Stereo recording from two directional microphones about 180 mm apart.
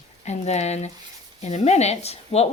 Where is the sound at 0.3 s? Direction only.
40° left (ahead or behind).